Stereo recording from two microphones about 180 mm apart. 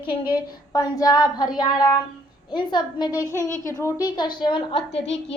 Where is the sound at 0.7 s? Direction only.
20° left (ahead or behind).